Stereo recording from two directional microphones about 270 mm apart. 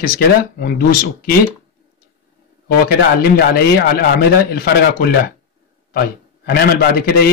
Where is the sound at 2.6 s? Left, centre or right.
Left.